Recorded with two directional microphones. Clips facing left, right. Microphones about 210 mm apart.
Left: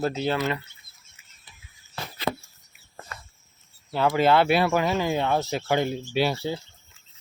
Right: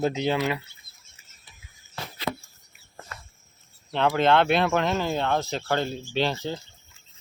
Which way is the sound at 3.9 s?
5° left (ahead or behind).